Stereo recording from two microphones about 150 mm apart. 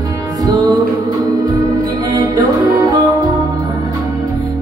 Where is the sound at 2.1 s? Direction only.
25° right (ahead or behind).